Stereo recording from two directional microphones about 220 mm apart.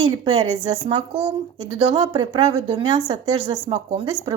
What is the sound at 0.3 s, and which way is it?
A woman's voice, 25° right (ahead or behind).